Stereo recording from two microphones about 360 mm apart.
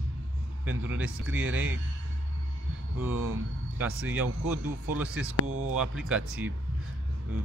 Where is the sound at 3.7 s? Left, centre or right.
Centre.